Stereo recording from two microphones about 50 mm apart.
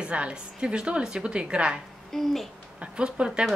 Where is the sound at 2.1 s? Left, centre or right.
Centre.